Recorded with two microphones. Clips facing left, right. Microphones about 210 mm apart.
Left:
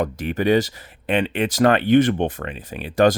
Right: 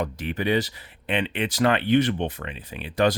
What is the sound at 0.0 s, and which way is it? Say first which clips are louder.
Speech: left 5 dB; 45° left (ahead or behind).